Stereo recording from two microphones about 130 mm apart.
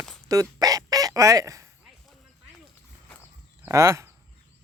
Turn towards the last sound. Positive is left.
turn(degrees=-20)  # may be behind; listen again after turning